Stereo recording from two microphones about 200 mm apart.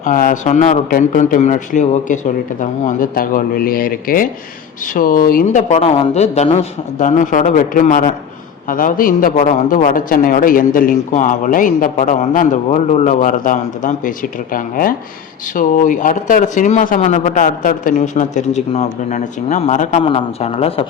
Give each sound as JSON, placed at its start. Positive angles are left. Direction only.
{"t": 0.0, "sound": "a man's voice", "side_deg": 40}